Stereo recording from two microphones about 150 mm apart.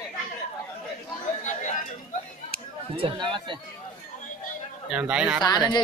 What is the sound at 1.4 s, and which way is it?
Chatter, 55° left (ahead or behind).